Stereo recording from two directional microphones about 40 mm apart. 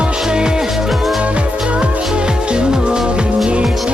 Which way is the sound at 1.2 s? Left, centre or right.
Right.